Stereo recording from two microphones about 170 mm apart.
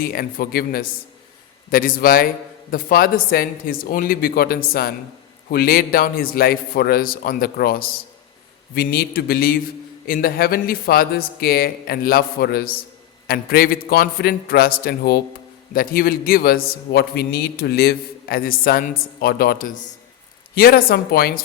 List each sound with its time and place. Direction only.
0.0 s a man's voice: 60° left (ahead or behind)